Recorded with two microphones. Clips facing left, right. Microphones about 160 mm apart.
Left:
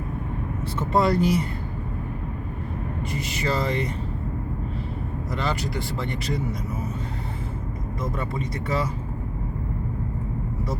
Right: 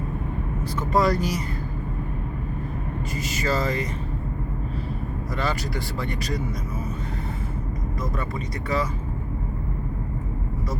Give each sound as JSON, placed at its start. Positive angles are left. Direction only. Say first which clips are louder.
{"t": 0.8, "sound": "speech", "louder": "left 1 dB", "side_deg": 25}
{"t": 3.4, "sound": "speech", "louder": "even", "side_deg": 25}
{"t": 5.4, "sound": "speech", "louder": "even", "side_deg": 20}
{"t": 8.0, "sound": "speech", "louder": "left 3 dB", "side_deg": 30}